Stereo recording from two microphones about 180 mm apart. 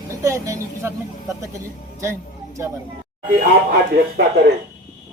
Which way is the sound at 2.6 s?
15° right (ahead or behind).